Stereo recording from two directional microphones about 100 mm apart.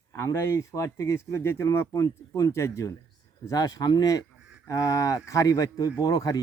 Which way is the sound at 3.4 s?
40° left (ahead or behind).